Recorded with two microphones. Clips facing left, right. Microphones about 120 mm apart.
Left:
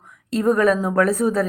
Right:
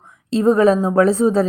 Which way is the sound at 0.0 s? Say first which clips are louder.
Right 4 dB; 25° right (ahead or behind).